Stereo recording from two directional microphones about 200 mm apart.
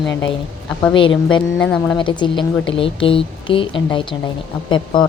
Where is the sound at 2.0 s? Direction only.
25° left (ahead or behind).